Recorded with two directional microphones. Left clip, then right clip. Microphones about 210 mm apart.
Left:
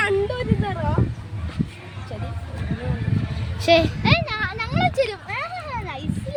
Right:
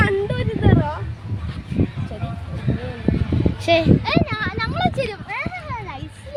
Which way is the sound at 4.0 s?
10° right (ahead or behind).